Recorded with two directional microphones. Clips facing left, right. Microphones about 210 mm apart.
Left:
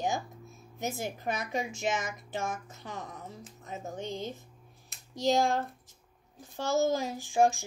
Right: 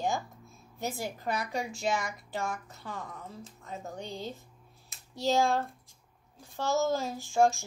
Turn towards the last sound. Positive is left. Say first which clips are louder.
# even
turn(degrees=15)  # may be behind; listen again after turning